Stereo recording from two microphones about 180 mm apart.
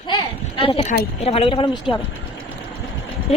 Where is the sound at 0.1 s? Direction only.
30° left (ahead or behind).